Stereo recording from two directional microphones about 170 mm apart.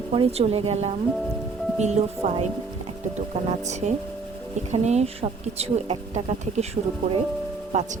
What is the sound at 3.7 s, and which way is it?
Speech, 45° right (ahead or behind).